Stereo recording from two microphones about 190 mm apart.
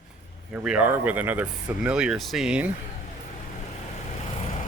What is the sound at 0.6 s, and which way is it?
Speech, 5° right (ahead or behind).